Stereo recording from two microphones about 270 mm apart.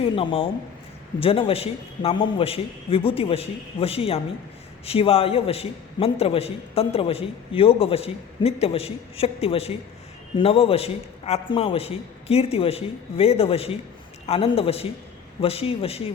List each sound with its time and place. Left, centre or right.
0.0 s a man's voice: centre